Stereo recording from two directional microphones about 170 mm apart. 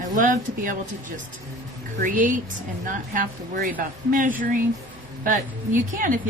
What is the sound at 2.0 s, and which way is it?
Speech, 50° right (ahead or behind).